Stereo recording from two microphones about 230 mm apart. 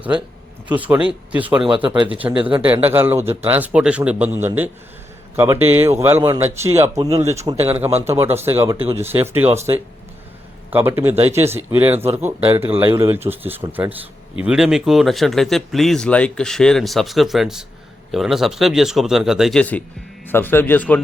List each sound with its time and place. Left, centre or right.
0.7 s a man's voice: centre
2.3 s speech: right
2.6 s a man's voice: centre